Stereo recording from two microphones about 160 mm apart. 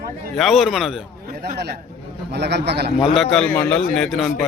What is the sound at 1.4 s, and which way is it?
A man's voice, 90° right.